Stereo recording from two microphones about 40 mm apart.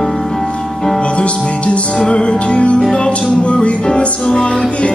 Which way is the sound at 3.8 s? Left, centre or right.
Centre.